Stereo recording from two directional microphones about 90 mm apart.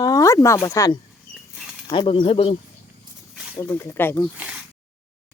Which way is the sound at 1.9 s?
65° left (ahead or behind).